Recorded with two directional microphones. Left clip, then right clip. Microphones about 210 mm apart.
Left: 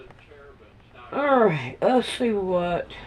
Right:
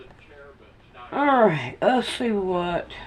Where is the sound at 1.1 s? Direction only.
30° right (ahead or behind).